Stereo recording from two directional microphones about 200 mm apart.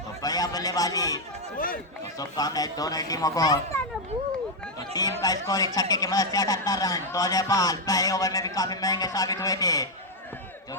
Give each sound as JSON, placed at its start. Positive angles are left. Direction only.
{"t": 0.2, "sound": "a sound", "side_deg": 20}
{"t": 1.5, "sound": "speech", "side_deg": 45}
{"t": 2.1, "sound": "a man's voice", "side_deg": 20}
{"t": 4.9, "sound": "speech", "side_deg": 20}